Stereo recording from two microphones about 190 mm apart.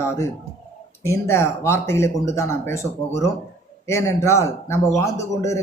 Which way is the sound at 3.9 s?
15° left (ahead or behind).